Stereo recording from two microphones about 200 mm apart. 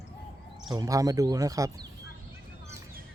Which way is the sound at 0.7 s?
15° right (ahead or behind).